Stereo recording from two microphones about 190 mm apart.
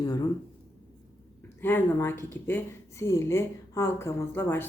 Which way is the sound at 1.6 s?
10° left (ahead or behind).